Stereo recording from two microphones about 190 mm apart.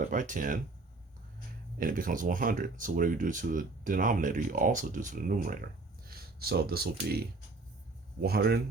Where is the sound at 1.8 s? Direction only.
45° right (ahead or behind).